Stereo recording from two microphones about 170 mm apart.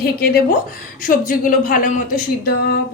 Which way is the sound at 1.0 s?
50° left (ahead or behind).